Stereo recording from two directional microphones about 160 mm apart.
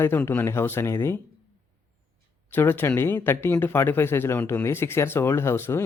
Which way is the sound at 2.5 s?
15° left (ahead or behind).